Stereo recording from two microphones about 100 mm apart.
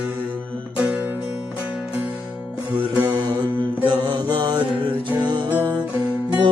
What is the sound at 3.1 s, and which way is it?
Mantra, 50° right (ahead or behind).